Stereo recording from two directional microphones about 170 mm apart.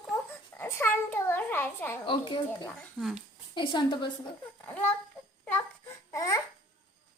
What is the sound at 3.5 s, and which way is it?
Speech, 30° left (ahead or behind).